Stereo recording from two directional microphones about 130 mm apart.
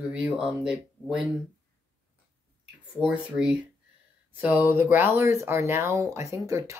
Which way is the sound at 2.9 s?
5° right (ahead or behind).